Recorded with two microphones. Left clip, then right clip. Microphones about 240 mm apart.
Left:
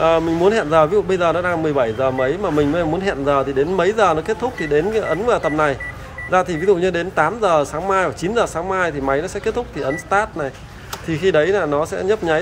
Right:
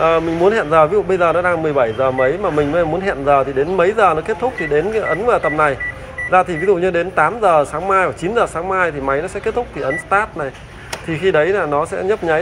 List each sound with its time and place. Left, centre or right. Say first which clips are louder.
0.0 s a man's voice: right 1 dB; left